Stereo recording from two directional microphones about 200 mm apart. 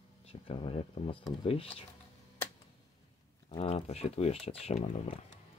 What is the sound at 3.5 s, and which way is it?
Cutlery, 30° left (ahead or behind).